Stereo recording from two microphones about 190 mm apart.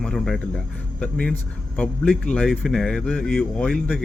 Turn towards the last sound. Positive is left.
turn(degrees=5)  # may be behind; listen again after turning